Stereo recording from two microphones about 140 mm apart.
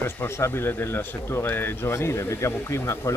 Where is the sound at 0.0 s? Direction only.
15° left (ahead or behind).